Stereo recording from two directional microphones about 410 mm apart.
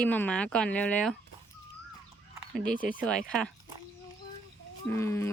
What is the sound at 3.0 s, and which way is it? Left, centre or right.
Speech, centre.